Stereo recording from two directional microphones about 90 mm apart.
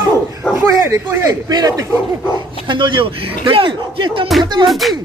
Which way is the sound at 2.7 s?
60° right (ahead or behind).